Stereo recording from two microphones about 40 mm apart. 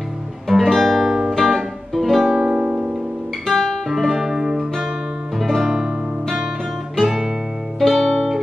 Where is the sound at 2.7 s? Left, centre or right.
Right.